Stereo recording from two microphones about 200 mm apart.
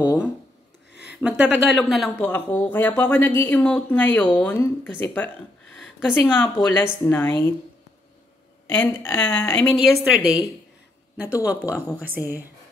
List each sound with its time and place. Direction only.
1.2 s speech: 5° right (ahead or behind); by 7.5 s 10° left (ahead or behind)
8.6 s speech: 10° left (ahead or behind)
10.0 s a woman's voice: 5° right (ahead or behind)
11.4 s speech: 5° right (ahead or behind)